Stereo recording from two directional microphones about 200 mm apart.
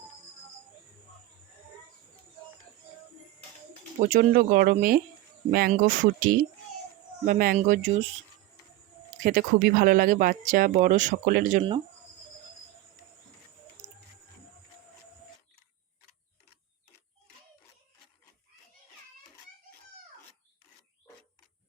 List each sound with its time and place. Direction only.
4.0 s speech: 45° right (ahead or behind)
9.2 s speech: 45° right (ahead or behind)